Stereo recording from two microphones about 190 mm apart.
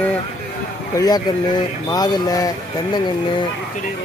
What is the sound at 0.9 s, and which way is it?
Speech, 20° left (ahead or behind).